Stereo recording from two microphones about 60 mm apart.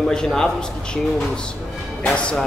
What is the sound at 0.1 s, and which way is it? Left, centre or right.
Speech, centre.